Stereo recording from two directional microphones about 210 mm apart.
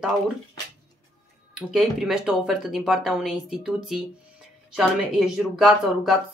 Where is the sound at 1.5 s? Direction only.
Centre (ahead or behind).